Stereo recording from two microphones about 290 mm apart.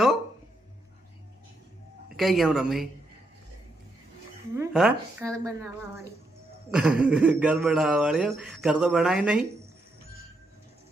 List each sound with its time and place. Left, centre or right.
2.1 s speech: centre
4.5 s a woman's voice: centre